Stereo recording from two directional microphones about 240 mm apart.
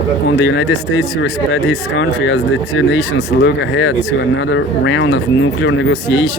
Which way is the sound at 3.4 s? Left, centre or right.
Left.